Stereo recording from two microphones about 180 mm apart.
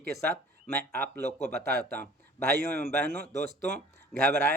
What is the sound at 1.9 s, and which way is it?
Speech, 10° left (ahead or behind).